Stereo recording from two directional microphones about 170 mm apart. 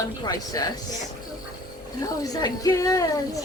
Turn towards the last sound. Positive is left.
turn(degrees=20)  # may be behind; listen again after turning